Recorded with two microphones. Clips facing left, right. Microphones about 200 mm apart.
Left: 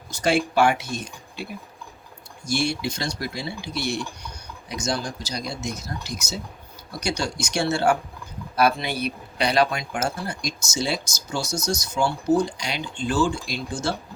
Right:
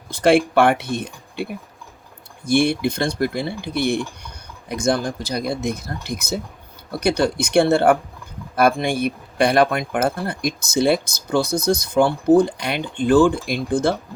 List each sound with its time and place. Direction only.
0.1 s speech: 55° right (ahead or behind)